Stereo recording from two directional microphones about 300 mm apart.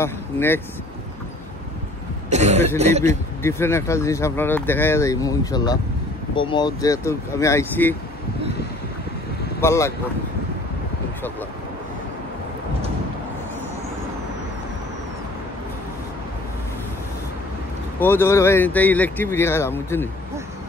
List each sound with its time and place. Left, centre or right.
0.0 s speech: centre
2.2 s speech: right
3.4 s speech: centre
9.6 s speech: centre
18.0 s speech: centre